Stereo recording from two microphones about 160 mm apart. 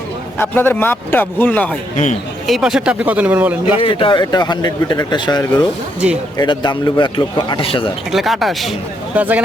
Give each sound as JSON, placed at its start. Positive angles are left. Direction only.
{"t": 0.3, "sound": "a man's voice", "side_deg": 15}
{"t": 2.5, "sound": "speech", "side_deg": -5}
{"t": 3.8, "sound": "speech", "side_deg": 35}
{"t": 8.1, "sound": "speech", "side_deg": 0}